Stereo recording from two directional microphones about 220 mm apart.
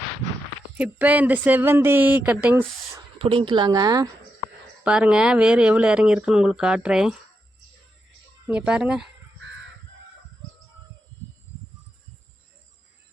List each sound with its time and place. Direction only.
0.8 s speech: 5° right (ahead or behind)
3.2 s speech: 25° right (ahead or behind)
4.8 s speech: 5° right (ahead or behind)
8.4 s speech: 5° right (ahead or behind)